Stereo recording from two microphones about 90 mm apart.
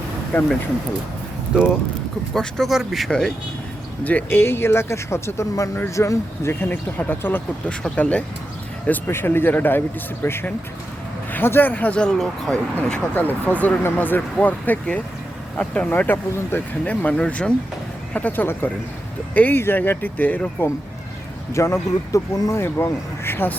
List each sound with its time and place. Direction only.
0.3 s speech: 15° left (ahead or behind)
1.5 s speech: 10° right (ahead or behind)
2.3 s speech: 5° left (ahead or behind)
4.0 s speech: 20° left (ahead or behind)
7.7 s speech: 10° left (ahead or behind)
8.9 s speech: 25° left (ahead or behind); by 12.5 s 5° left (ahead or behind)
12.7 s speech: 20° left (ahead or behind)
15.9 s speech: 25° left (ahead or behind)
21.5 s speech: 30° left (ahead or behind)